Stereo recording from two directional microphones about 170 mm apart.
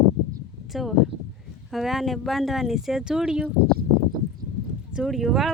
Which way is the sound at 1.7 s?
Centre (ahead or behind).